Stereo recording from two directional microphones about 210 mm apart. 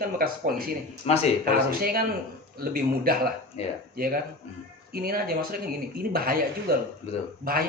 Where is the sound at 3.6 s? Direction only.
30° left (ahead or behind).